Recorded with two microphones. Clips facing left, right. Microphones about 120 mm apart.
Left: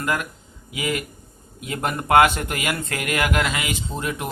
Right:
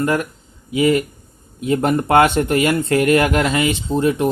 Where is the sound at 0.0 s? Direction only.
30° right (ahead or behind).